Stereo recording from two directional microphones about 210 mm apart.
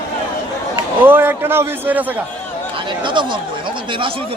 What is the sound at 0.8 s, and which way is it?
A man's voice, 10° right (ahead or behind).